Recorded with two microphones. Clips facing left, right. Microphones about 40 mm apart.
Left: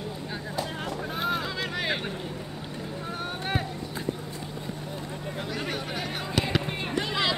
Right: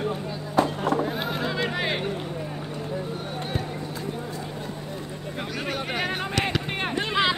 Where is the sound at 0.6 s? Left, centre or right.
Right.